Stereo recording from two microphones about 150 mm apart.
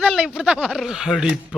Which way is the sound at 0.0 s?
5° right (ahead or behind).